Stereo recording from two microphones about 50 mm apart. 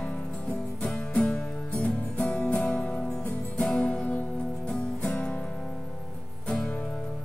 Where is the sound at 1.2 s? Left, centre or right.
Centre.